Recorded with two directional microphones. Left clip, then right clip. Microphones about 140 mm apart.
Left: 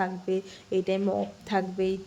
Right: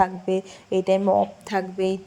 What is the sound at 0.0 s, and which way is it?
Speech, 25° right (ahead or behind).